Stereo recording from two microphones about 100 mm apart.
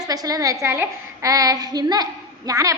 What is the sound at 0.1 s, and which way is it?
Speech, 35° right (ahead or behind).